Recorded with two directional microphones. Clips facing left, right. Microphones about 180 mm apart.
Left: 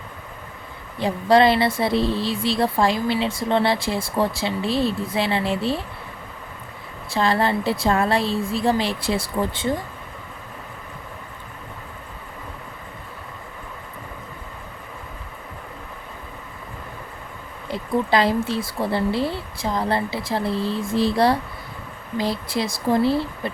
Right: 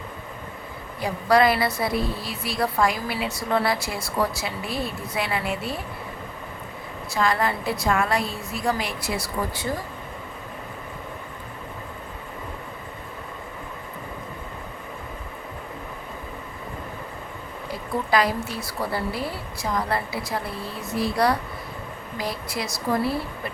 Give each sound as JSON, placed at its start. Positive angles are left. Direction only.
{"t": 0.9, "sound": "a woman's voice", "side_deg": 25}
{"t": 7.1, "sound": "a woman's voice", "side_deg": 30}
{"t": 17.7, "sound": "a woman's voice", "side_deg": 25}